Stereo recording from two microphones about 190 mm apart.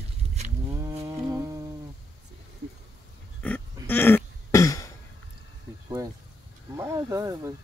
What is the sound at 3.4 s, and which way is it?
Dog, 10° left (ahead or behind).